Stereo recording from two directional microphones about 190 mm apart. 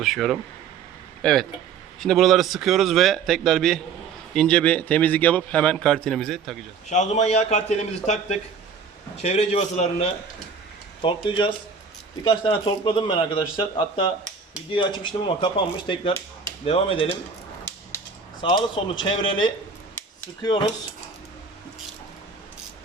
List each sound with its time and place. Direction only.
0.0 s a man's voice: centre (ahead or behind)
6.9 s a man's voice: 35° left (ahead or behind)
18.3 s speech: 25° left (ahead or behind)